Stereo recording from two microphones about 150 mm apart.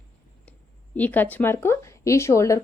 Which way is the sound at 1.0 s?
10° left (ahead or behind).